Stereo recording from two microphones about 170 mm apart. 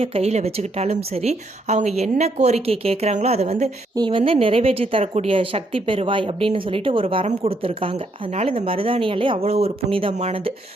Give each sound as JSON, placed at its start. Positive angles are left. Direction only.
{"t": 0.0, "sound": "a woman's voice", "side_deg": -35}
{"t": 3.9, "sound": "a woman's voice", "side_deg": -25}